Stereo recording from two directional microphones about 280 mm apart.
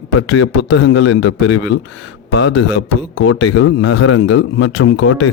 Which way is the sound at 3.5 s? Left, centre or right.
Left.